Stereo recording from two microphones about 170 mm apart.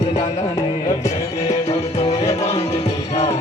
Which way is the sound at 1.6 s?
40° left (ahead or behind).